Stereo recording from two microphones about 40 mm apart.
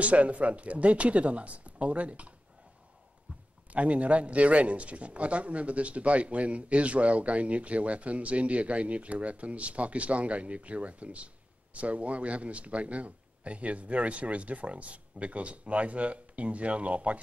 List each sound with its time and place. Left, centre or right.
0.0 s speech: right
3.7 s speech: right